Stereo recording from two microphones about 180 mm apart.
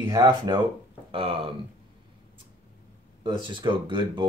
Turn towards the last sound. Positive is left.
turn(degrees=-25)  # may be behind; listen again after turning